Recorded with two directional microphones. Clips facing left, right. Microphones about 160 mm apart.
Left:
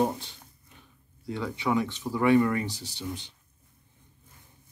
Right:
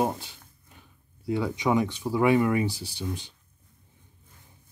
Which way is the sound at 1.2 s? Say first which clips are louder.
Right 4 dB; 10° right (ahead or behind).